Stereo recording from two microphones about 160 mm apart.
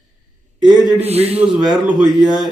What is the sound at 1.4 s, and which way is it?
Speech, 5° right (ahead or behind).